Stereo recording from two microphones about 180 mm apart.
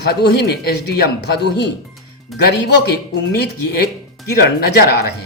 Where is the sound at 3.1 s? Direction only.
65° left (ahead or behind).